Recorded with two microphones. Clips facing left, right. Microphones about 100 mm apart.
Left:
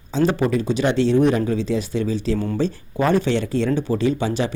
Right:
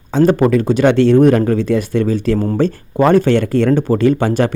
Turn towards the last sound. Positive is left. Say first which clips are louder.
# right 7 dB
turn(degrees=-55)  # may be behind; listen again after turning